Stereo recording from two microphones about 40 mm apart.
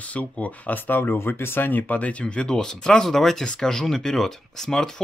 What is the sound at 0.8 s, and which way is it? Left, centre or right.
Speech, left.